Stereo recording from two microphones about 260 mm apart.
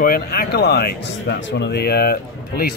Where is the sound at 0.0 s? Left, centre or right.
Left.